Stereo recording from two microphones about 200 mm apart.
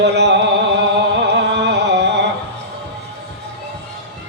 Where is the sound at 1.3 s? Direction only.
60° right (ahead or behind).